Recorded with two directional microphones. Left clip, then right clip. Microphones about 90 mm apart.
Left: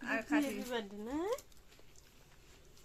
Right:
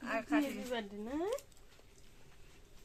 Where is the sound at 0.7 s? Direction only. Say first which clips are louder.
Even; 45° left (ahead or behind).